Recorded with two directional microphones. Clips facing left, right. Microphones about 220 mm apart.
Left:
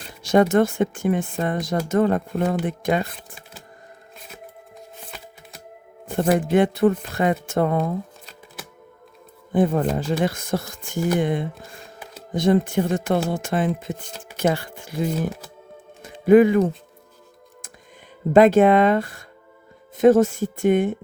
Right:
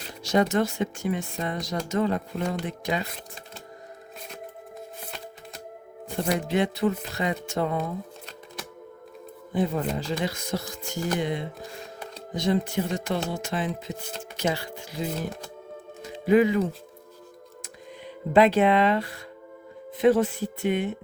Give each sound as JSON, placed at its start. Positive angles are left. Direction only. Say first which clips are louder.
{"t": 0.2, "sound": "speech", "louder": "left 6 dB", "side_deg": 50}
{"t": 6.1, "sound": "speech", "louder": "left 7 dB", "side_deg": 50}
{"t": 9.5, "sound": "speech", "louder": "left 6 dB", "side_deg": 50}
{"t": 17.6, "sound": "music", "louder": "right 8 dB", "side_deg": 50}
{"t": 20.0, "sound": "speech", "louder": "left 6 dB", "side_deg": 45}